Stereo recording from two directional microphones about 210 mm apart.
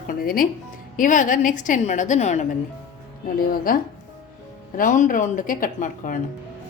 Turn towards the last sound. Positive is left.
turn(degrees=40)  # may be behind; listen again after turning